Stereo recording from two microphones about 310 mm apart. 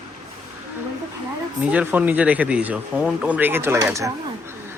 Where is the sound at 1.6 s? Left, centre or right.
Centre.